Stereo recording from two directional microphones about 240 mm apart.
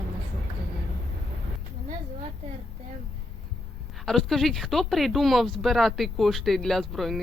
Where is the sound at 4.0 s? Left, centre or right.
Centre.